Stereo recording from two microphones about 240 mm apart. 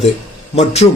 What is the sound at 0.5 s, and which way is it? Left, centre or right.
Mantra, left.